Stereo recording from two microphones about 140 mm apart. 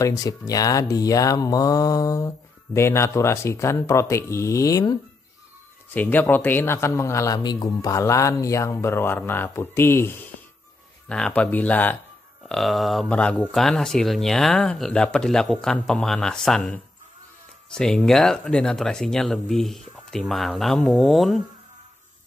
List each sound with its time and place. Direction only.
0.0 s speech: 25° left (ahead or behind)
5.9 s speech: 10° left (ahead or behind)
12.4 s speech: centre (ahead or behind)